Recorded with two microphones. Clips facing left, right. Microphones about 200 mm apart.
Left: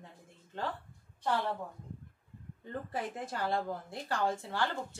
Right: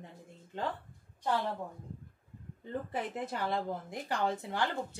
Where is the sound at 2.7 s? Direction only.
20° right (ahead or behind).